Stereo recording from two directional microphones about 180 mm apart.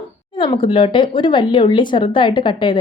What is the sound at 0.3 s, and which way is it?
Speech, 25° left (ahead or behind).